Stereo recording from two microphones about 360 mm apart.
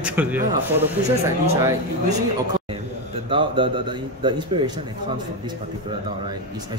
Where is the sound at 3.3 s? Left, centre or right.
Centre.